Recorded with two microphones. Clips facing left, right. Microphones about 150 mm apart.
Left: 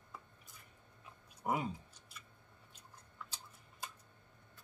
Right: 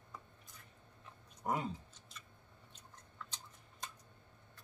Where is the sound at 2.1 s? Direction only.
10° left (ahead or behind).